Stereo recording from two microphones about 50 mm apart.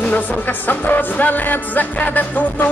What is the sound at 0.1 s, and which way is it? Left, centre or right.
Music, left.